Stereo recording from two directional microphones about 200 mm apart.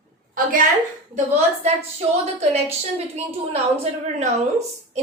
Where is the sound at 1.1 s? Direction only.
30° right (ahead or behind).